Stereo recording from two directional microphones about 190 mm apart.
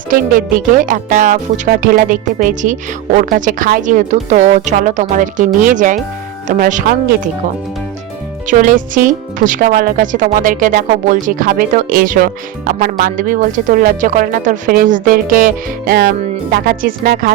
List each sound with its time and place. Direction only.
0.1 s a woman's voice: 45° right (ahead or behind)
8.4 s speech: 45° right (ahead or behind)